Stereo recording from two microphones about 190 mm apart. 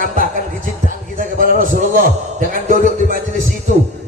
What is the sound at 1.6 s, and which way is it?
A man's voice, 45° right (ahead or behind).